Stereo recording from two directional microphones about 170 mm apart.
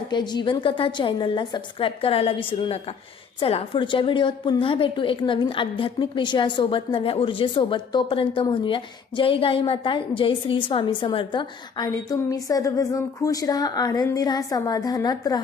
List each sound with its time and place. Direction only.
0.1 s a woman's voice: 25° left (ahead or behind)